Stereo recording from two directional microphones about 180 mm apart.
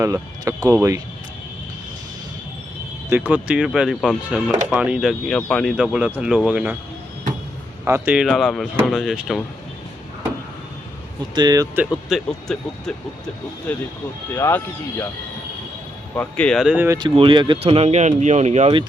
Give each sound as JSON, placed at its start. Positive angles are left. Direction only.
{"t": 0.0, "sound": "speech", "side_deg": -20}
{"t": 3.1, "sound": "speech", "side_deg": -10}
{"t": 7.9, "sound": "speech", "side_deg": -10}
{"t": 11.3, "sound": "speech", "side_deg": -20}
{"t": 13.7, "sound": "speech", "side_deg": 5}
{"t": 16.1, "sound": "speech", "side_deg": 5}
{"t": 16.7, "sound": "speech", "side_deg": -15}
{"t": 17.0, "sound": "speech", "side_deg": -25}